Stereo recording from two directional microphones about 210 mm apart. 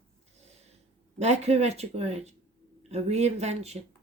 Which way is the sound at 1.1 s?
30° right (ahead or behind).